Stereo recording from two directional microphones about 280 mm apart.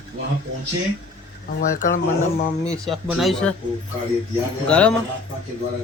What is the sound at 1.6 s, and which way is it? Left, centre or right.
Speech, left.